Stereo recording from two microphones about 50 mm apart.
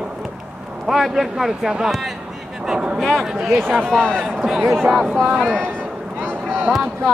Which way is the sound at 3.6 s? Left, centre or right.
Centre.